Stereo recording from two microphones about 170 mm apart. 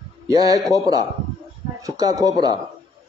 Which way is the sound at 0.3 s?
20° right (ahead or behind).